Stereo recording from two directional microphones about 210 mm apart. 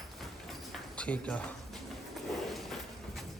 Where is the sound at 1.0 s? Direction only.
5° left (ahead or behind).